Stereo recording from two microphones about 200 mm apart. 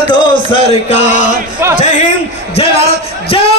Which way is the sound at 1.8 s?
40° left (ahead or behind).